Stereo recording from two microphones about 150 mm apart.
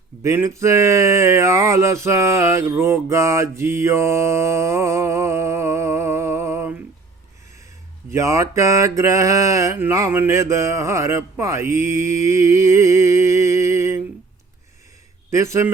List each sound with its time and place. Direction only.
0.2 s speech: 20° right (ahead or behind)
8.1 s speech: 20° right (ahead or behind)
15.3 s speech: 20° right (ahead or behind)